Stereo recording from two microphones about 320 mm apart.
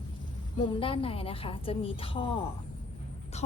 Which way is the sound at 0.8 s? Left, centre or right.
Centre.